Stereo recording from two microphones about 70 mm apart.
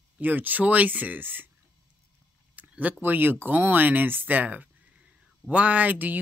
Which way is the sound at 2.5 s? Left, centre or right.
Right.